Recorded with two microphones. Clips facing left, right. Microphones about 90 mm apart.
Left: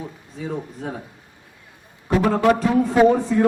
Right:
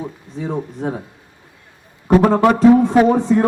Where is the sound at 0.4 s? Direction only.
25° right (ahead or behind).